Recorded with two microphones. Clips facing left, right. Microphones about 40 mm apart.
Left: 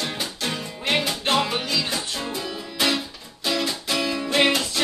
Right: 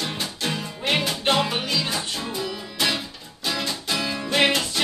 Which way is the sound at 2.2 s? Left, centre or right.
Centre.